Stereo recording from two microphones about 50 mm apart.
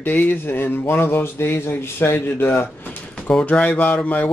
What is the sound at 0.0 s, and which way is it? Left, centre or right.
Speech, left.